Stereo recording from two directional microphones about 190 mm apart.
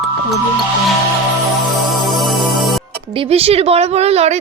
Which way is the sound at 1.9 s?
Centre (ahead or behind).